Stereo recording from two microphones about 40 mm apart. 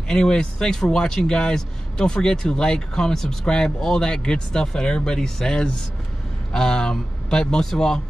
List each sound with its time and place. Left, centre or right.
0.1 s speech: centre